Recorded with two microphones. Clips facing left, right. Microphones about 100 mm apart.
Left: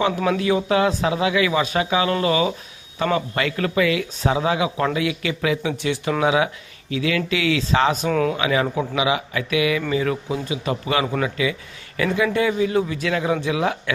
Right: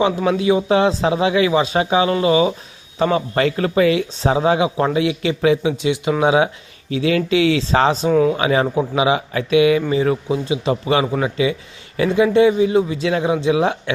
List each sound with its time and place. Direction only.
0.0 s a man's voice: 20° right (ahead or behind)
5.7 s a man's voice: 20° right (ahead or behind)
8.1 s speech: 10° right (ahead or behind)
8.4 s a man's voice: 35° right (ahead or behind)